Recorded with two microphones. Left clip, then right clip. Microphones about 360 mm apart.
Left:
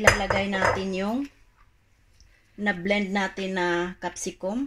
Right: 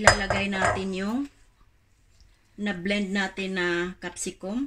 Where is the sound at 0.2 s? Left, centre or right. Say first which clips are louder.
Left 1 dB; centre.